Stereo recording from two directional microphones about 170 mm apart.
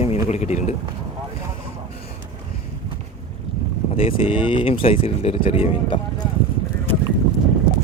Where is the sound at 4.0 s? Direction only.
30° left (ahead or behind).